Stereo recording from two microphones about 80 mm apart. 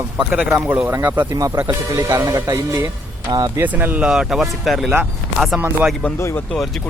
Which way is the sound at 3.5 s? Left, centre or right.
Right.